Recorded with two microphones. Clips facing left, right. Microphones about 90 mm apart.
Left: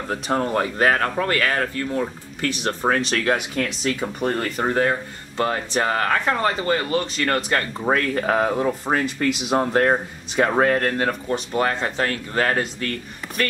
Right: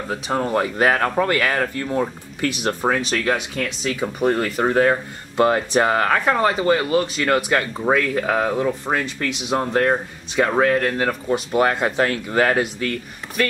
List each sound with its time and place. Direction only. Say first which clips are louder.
0.1 s speech: right 1 dB; 5° right (ahead or behind)
5.4 s speech: right 5 dB; 25° right (ahead or behind); by 11.1 s centre (ahead or behind)
11.2 s speech: right 3 dB; 15° right (ahead or behind)